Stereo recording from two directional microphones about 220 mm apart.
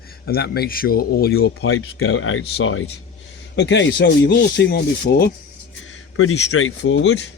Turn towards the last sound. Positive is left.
turn(degrees=60)  # may be behind; listen again after turning